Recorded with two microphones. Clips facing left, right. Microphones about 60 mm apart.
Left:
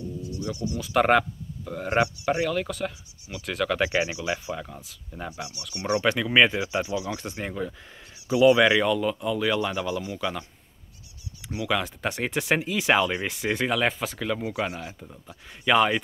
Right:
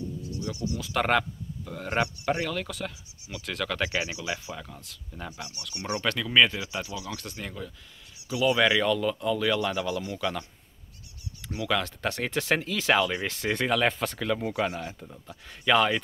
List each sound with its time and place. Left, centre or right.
0.2 s a sound: left
0.7 s speech: centre; by 4.6 s left
4.6 s speech: centre
11.4 s speech: centre